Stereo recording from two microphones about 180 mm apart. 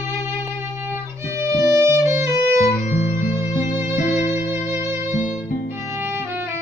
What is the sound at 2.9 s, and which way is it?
Music, 45° left (ahead or behind).